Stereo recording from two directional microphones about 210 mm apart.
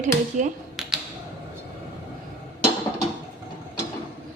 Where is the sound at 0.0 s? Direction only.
35° right (ahead or behind).